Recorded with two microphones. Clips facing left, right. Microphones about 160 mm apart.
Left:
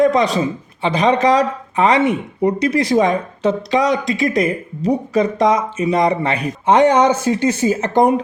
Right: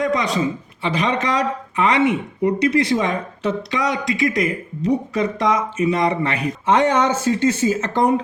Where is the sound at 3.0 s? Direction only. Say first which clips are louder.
Left 6 dB; 20° left (ahead or behind).